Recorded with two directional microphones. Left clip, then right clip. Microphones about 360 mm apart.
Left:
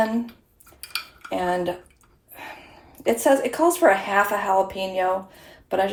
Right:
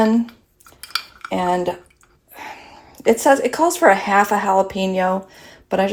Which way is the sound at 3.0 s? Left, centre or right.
Right.